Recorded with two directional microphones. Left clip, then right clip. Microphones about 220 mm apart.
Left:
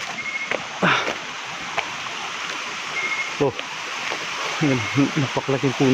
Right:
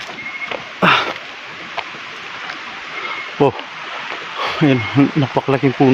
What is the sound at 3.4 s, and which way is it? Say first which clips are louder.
Speech: right 9 dB; 35° right (ahead or behind).